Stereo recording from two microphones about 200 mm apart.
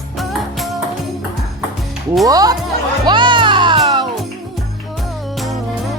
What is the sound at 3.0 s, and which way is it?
Music, 25° right (ahead or behind).